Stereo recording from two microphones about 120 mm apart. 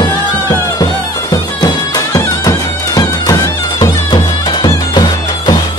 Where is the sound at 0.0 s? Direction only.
30° left (ahead or behind).